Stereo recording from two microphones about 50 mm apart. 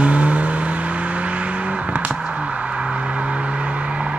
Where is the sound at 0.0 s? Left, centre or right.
Right.